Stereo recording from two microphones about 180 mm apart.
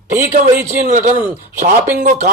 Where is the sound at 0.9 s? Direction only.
45° right (ahead or behind).